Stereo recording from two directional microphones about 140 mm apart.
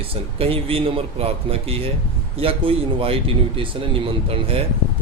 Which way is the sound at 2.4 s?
40° right (ahead or behind).